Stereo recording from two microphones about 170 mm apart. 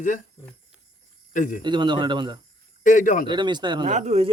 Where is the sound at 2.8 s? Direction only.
50° left (ahead or behind).